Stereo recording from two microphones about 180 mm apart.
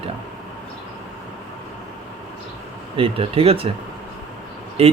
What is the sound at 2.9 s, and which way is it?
Speech, 30° right (ahead or behind).